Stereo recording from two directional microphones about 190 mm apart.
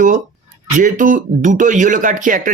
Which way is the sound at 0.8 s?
45° right (ahead or behind).